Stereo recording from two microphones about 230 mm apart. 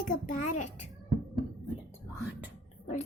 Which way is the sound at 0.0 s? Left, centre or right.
Left.